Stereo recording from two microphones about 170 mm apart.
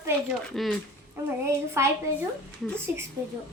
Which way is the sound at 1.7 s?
15° right (ahead or behind).